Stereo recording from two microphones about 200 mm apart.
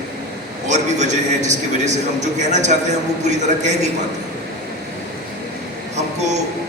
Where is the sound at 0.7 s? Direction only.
35° right (ahead or behind).